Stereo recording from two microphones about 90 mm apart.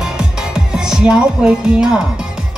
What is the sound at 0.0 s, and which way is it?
Music, 10° right (ahead or behind).